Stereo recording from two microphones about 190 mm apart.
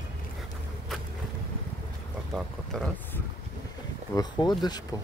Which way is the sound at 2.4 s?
5° left (ahead or behind).